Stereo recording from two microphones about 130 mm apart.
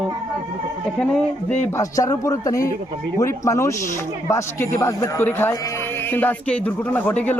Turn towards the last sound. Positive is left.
turn(degrees=15)  # may be behind; listen again after turning